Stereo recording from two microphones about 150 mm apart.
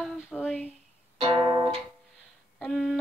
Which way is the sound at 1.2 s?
35° right (ahead or behind).